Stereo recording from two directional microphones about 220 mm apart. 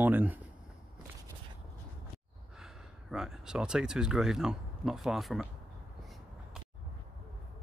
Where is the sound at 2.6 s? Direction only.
Centre (ahead or behind).